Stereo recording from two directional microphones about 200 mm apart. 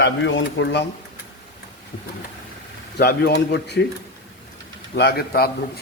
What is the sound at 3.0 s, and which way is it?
Speech, 55° left (ahead or behind).